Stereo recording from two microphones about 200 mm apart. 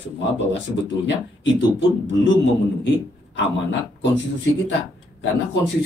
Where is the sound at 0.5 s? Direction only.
65° left (ahead or behind).